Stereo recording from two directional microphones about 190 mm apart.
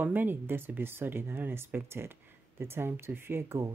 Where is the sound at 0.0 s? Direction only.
10° right (ahead or behind).